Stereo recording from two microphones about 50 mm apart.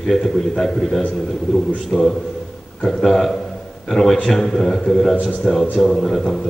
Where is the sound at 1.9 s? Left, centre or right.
Centre.